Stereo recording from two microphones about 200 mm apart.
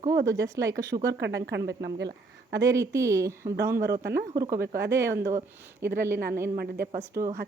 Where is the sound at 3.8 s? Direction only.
55° right (ahead or behind).